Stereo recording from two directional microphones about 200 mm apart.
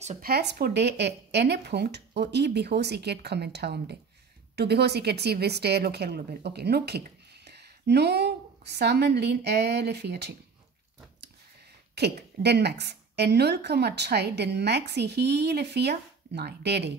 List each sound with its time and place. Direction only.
0.0 s speech: 35° right (ahead or behind)
0.3 s a woman's voice: 50° right (ahead or behind)
11.9 s a woman's voice: 55° right (ahead or behind)